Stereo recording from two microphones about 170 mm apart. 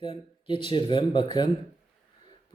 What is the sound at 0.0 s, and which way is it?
Speech, 30° left (ahead or behind).